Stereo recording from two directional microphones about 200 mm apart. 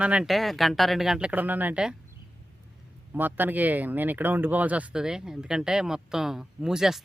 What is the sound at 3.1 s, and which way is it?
Speech, 10° right (ahead or behind).